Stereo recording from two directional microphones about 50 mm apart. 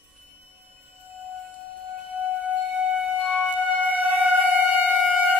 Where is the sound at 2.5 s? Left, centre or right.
Right.